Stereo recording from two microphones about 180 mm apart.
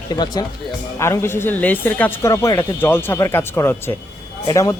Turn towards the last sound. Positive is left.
turn(degrees=15)  # may be behind; listen again after turning